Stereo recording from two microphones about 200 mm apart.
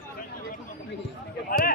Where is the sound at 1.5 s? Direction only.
45° left (ahead or behind).